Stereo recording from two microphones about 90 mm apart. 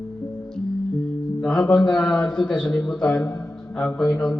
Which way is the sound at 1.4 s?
5° left (ahead or behind).